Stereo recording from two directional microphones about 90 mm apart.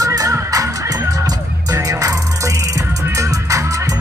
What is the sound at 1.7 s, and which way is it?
Music, 40° right (ahead or behind).